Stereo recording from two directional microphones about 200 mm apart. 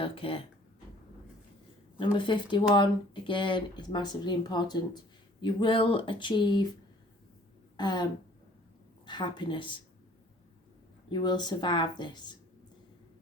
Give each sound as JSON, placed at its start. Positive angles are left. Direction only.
{"t": 0.0, "sound": "speech", "side_deg": 25}
{"t": 2.1, "sound": "speech", "side_deg": 25}
{"t": 7.8, "sound": "a sound", "side_deg": 20}
{"t": 9.0, "sound": "speech", "side_deg": 20}
{"t": 11.1, "sound": "speech", "side_deg": 20}